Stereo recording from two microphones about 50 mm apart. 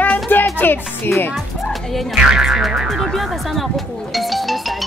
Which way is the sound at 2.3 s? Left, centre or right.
Centre.